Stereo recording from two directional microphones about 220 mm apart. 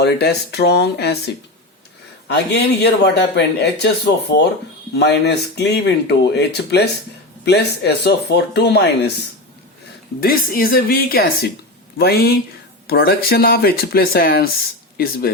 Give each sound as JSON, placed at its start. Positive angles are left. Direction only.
{"t": 0.0, "sound": "speech", "side_deg": 50}
{"t": 2.2, "sound": "speech", "side_deg": 50}
{"t": 4.9, "sound": "speech", "side_deg": 50}
{"t": 10.2, "sound": "speech", "side_deg": 40}